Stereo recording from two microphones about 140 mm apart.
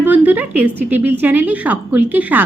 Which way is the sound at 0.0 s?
10° right (ahead or behind).